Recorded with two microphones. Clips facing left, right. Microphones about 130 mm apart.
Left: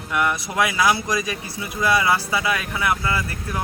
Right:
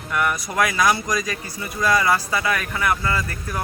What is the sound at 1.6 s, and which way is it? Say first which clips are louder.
Speech: even; 10° left (ahead or behind).